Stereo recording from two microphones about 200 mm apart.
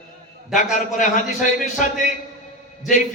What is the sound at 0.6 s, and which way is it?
Speech, 40° left (ahead or behind).